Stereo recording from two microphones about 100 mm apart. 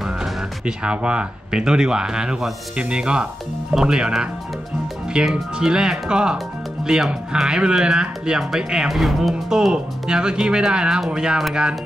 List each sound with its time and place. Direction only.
0.0 s speech: 10° right (ahead or behind)